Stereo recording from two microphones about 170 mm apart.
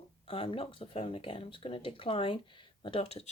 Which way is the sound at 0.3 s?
30° left (ahead or behind).